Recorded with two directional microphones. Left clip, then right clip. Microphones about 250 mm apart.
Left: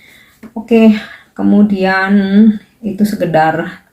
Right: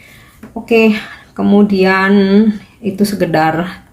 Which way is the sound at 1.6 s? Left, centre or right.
Right.